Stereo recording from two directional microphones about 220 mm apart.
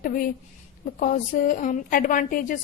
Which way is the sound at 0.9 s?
35° left (ahead or behind).